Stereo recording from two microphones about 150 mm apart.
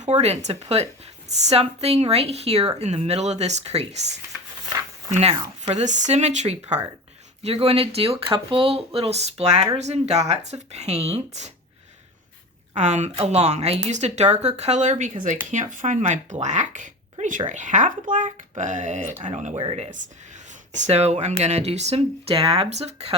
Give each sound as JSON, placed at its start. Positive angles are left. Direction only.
{"t": 0.0, "sound": "speech", "side_deg": -45}
{"t": 5.1, "sound": "speech", "side_deg": -45}
{"t": 12.7, "sound": "speech", "side_deg": -50}